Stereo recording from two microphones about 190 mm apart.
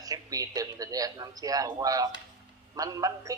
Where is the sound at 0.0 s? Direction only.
20° right (ahead or behind).